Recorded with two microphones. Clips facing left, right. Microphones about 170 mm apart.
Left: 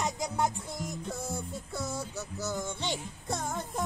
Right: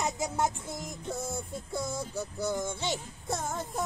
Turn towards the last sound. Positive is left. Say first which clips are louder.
# right 1 dB
turn(degrees=-5)  # may be behind; listen again after turning